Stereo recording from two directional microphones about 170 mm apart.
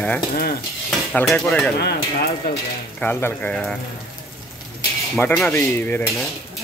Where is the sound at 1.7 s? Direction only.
75° left (ahead or behind).